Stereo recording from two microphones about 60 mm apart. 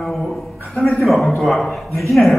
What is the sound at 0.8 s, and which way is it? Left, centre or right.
Speech, left.